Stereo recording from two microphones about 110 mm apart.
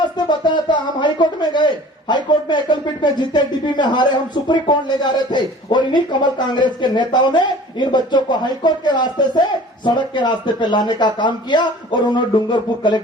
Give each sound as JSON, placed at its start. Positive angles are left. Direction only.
{"t": 0.3, "sound": "a man's voice", "side_deg": 45}